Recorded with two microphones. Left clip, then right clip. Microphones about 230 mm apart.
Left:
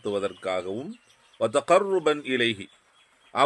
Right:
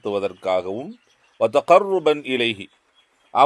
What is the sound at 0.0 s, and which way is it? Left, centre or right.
A man's voice, centre.